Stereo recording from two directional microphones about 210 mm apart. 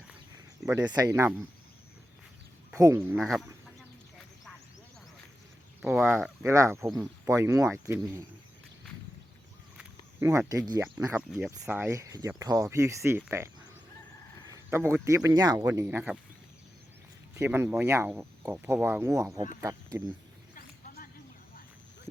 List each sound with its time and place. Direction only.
0.6 s speech: 15° right (ahead or behind)
2.7 s speech: 15° right (ahead or behind)
3.2 s speech: centre (ahead or behind)
5.8 s speech: 5° right (ahead or behind)
10.2 s speech: 10° right (ahead or behind)
14.5 s speech: 10° right (ahead or behind)
17.3 s speech: 10° right (ahead or behind)
20.6 s a sound: 45° left (ahead or behind)